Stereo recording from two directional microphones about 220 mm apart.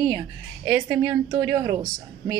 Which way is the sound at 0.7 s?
10° right (ahead or behind).